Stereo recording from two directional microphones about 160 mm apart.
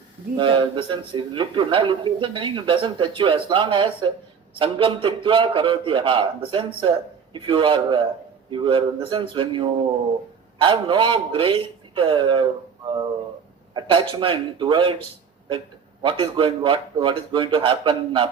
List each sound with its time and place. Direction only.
0.3 s a man's voice: 30° right (ahead or behind)
13.7 s a man's voice: 30° right (ahead or behind)